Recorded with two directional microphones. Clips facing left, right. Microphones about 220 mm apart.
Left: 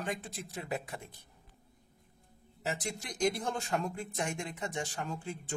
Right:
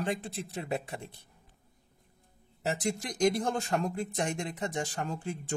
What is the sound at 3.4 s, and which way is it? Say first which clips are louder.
Speech: right 4 dB; 45° right (ahead or behind).